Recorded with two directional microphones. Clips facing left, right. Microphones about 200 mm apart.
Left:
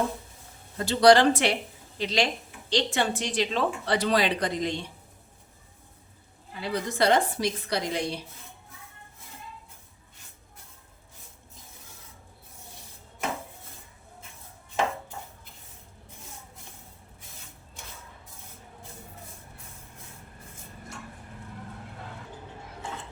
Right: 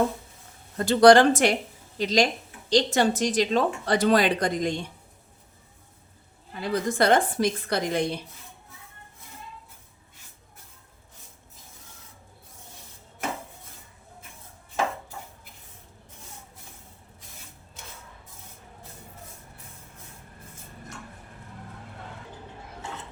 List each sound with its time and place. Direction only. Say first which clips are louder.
0.8 s speech: right 3 dB; 50° right (ahead or behind)
6.6 s speech: right 3 dB; 50° right (ahead or behind)